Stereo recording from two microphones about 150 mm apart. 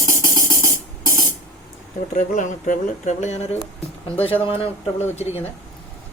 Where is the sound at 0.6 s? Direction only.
20° right (ahead or behind).